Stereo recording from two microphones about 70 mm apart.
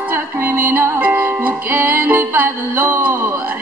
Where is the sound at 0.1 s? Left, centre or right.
Right.